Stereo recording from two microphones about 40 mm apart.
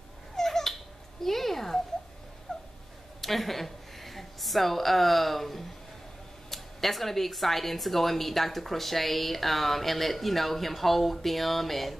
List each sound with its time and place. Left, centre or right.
0.4 s cat: centre
1.2 s a sound: centre
3.2 s a woman's voice: centre